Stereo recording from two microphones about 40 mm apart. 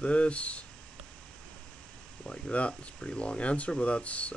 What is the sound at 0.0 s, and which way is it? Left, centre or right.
Speech, left.